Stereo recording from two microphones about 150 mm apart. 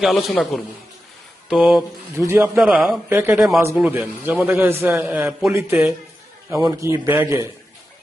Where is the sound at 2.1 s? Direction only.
20° right (ahead or behind).